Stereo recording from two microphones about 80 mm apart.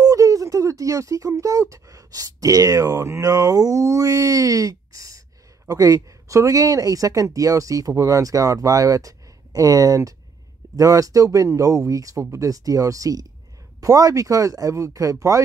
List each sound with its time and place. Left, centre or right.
0.0 s speech: right